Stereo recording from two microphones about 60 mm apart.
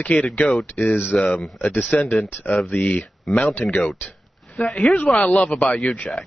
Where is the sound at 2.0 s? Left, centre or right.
Left.